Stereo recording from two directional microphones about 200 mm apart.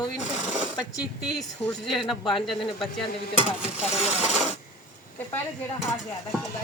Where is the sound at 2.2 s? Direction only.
25° left (ahead or behind).